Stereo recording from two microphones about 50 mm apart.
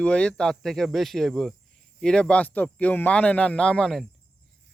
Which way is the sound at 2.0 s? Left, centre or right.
Centre.